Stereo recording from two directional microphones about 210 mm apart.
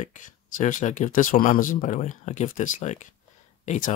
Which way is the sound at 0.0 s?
35° left (ahead or behind).